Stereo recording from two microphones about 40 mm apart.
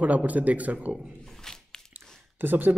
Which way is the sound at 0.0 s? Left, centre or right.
Right.